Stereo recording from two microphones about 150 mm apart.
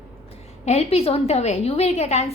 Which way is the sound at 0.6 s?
45° left (ahead or behind).